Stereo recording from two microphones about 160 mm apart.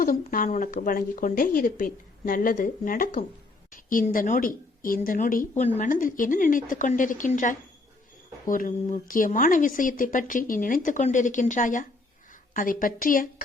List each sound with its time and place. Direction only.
0.0 s speech: 60° left (ahead or behind)
5.6 s speech: 40° left (ahead or behind)
5.9 s speech: 55° left (ahead or behind)